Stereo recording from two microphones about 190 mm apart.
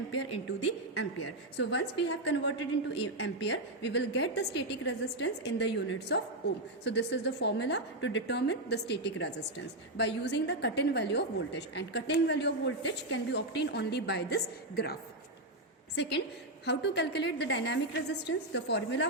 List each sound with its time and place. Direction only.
1.5 s a woman's voice: 65° left (ahead or behind)
16.0 s a woman's voice: 65° left (ahead or behind)